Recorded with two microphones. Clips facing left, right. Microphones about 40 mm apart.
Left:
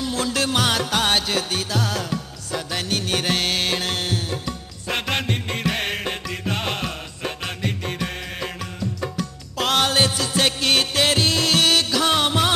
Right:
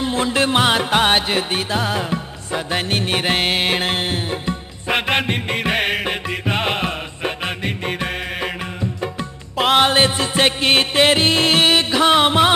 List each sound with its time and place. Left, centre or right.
0.0 s music: right
9.6 s music: right